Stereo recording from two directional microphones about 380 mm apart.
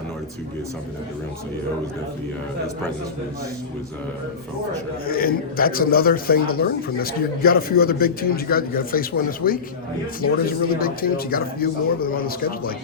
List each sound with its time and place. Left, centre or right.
5.0 s speech: left